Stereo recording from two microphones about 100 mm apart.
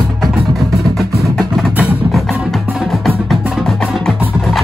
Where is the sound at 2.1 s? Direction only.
Centre (ahead or behind).